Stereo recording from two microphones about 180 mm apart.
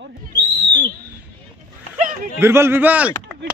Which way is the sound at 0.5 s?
25° right (ahead or behind).